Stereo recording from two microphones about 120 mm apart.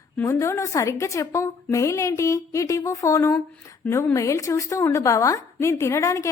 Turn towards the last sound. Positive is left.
turn(degrees=25)  # may be behind; listen again after turning